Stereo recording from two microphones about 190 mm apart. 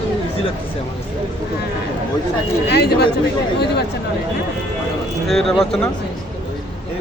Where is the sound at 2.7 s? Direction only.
60° left (ahead or behind).